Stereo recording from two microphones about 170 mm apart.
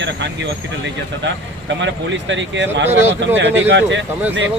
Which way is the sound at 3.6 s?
90° right.